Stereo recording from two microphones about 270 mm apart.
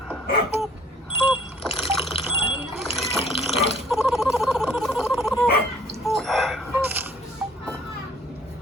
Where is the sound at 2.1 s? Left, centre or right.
Centre.